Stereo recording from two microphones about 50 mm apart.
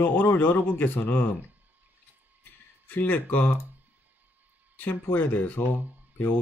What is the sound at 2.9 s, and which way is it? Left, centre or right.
Speech, left.